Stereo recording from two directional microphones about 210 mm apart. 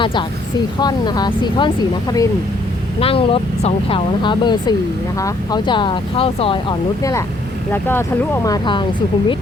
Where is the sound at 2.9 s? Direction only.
25° left (ahead or behind).